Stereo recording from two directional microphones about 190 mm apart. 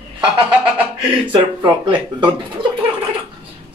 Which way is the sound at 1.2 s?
25° right (ahead or behind).